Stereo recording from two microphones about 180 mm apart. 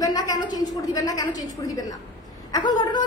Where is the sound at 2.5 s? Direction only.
25° left (ahead or behind).